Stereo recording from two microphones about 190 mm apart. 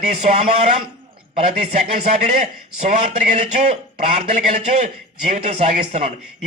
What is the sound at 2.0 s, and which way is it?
A man's voice, 35° right (ahead or behind).